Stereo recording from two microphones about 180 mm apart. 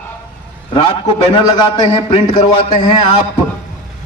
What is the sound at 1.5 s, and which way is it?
A man's voice, 25° left (ahead or behind).